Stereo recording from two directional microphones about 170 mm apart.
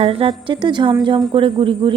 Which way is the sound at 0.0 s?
35° right (ahead or behind).